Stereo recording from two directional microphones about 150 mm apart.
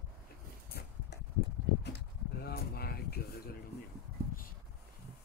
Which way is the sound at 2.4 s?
90° left.